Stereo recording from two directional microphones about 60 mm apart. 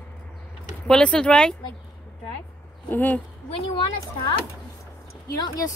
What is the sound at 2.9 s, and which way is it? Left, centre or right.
Speech, left.